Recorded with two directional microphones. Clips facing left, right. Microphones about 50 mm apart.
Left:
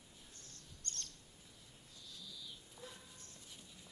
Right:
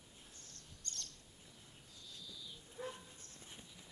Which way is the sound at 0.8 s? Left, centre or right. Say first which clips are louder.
Left 1 dB; left.